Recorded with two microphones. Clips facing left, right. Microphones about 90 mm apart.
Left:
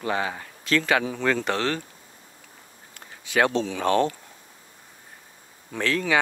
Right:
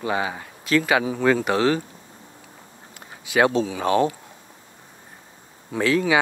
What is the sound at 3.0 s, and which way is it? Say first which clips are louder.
Speech: right 3 dB; 15° right (ahead or behind).